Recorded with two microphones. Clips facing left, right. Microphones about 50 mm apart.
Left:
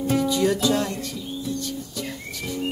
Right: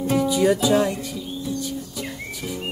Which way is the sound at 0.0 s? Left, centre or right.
Centre.